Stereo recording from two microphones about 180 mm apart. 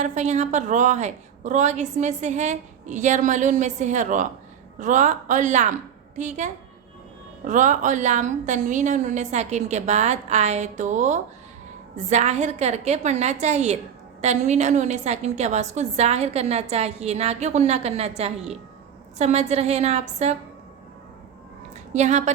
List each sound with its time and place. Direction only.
0.0 s a woman's voice: 40° right (ahead or behind)
21.9 s a woman's voice: 40° right (ahead or behind)